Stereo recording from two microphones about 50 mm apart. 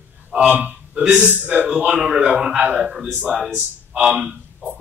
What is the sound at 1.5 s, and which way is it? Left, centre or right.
Speech, right.